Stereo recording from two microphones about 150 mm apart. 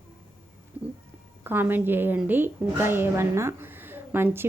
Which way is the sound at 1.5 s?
15° right (ahead or behind).